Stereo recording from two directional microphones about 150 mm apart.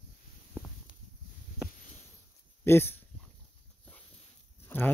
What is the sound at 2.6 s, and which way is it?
Speech, 15° left (ahead or behind).